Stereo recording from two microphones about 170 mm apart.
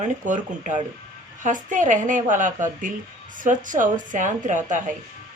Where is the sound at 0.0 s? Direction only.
45° right (ahead or behind).